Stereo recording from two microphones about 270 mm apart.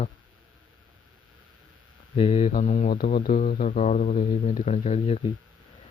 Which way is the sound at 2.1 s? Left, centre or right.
Left.